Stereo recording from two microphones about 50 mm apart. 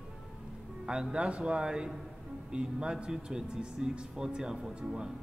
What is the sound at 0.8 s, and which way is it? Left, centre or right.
A man's voice, centre.